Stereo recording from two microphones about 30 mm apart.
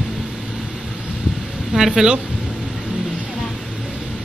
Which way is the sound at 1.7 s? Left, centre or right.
Centre.